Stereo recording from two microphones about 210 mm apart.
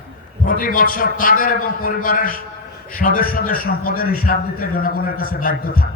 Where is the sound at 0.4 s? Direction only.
40° left (ahead or behind).